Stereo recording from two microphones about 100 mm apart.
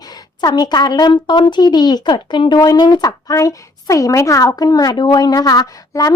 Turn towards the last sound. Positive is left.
turn(degrees=40)  # may be behind; listen again after turning